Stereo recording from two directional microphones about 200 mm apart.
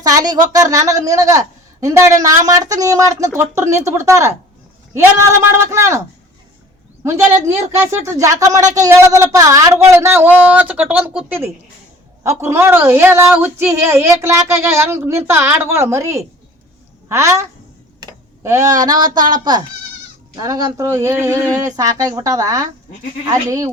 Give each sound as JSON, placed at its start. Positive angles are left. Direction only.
{"t": 0.0, "sound": "a woman's voice", "side_deg": -20}
{"t": 7.0, "sound": "a woman's voice", "side_deg": -10}
{"t": 20.3, "sound": "a woman's voice", "side_deg": -20}